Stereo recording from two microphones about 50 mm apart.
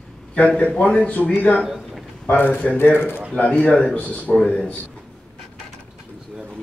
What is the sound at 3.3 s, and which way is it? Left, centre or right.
A man's voice, left.